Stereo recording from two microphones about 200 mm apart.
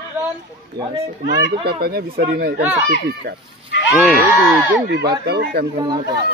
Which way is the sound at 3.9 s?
5° right (ahead or behind).